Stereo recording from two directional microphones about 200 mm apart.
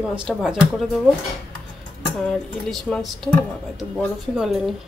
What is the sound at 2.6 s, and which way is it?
A woman's voice, 5° left (ahead or behind).